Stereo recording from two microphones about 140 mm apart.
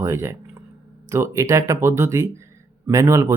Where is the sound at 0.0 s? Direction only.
20° right (ahead or behind).